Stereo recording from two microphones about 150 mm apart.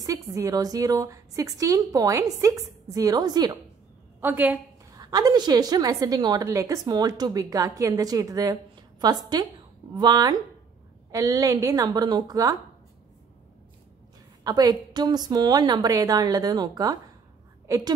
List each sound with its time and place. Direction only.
0.0 s a woman's voice: 20° right (ahead or behind)
4.2 s a woman's voice: 10° right (ahead or behind)
4.9 s a woman's voice: 25° right (ahead or behind)
14.4 s a woman's voice: 25° right (ahead or behind)